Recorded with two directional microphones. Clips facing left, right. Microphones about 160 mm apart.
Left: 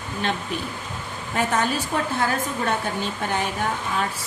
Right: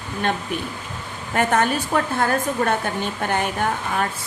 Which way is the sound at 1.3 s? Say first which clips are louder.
Right 4 dB; 55° right (ahead or behind).